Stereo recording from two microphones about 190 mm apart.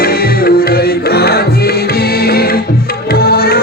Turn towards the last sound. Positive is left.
turn(degrees=55)  # may be behind; listen again after turning